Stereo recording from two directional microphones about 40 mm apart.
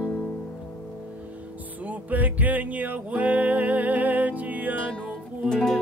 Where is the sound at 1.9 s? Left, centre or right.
Right.